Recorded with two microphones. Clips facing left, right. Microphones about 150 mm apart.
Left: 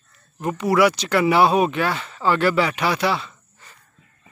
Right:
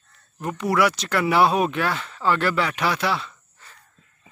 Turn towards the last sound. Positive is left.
turn(degrees=0)  # may be behind; listen again after turning